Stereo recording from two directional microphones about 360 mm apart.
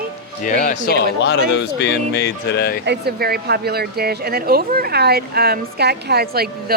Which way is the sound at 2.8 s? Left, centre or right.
Right.